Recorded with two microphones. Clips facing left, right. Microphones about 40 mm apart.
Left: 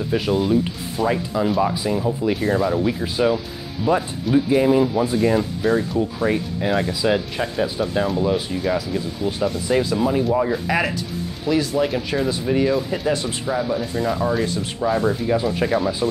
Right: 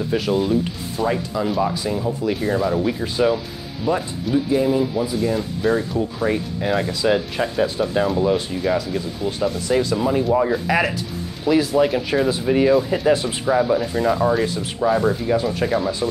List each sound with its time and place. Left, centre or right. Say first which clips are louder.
0.1 s speech: left 1 dB; centre
3.8 s speech: left 2 dB; centre
4.6 s speech: left 2 dB; left
5.4 s speech: even; centre
7.6 s speech: right 1 dB; centre
7.9 s speech: right 2 dB; centre
9.9 s speech: right 1 dB; centre